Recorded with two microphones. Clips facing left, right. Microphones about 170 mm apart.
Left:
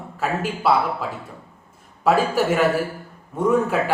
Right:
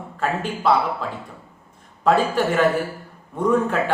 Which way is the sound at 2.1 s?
5° left (ahead or behind).